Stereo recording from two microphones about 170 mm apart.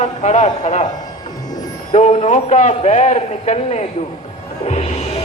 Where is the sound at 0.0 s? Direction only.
45° left (ahead or behind).